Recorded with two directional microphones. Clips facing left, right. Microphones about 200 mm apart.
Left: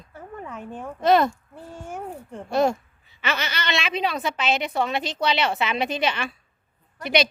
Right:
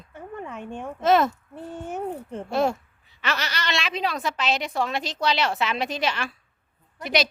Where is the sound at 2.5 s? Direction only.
Centre (ahead or behind).